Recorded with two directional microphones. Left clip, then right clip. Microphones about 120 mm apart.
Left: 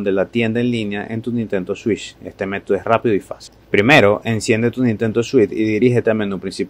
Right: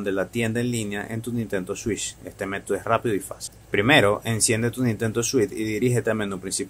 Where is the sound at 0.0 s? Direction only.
25° left (ahead or behind).